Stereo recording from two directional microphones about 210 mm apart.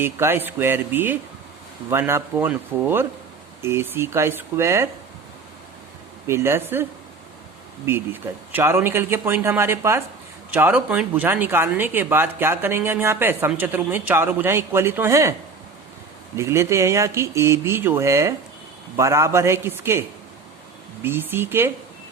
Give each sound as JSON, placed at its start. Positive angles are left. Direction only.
{"t": 0.0, "sound": "speech", "side_deg": -10}
{"t": 6.2, "sound": "speech", "side_deg": -10}
{"t": 7.9, "sound": "speech", "side_deg": -10}